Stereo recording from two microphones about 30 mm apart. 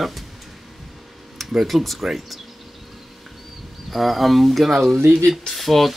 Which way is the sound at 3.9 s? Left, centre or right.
Centre.